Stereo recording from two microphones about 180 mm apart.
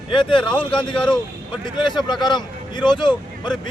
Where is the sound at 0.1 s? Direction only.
25° left (ahead or behind).